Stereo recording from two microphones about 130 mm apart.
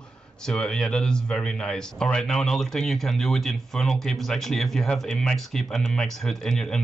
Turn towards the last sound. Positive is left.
turn(degrees=5)  # may be behind; listen again after turning